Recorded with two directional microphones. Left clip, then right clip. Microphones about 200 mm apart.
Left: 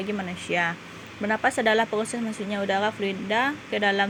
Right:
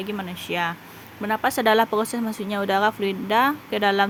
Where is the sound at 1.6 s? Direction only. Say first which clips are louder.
Right 3 dB; 60° right (ahead or behind).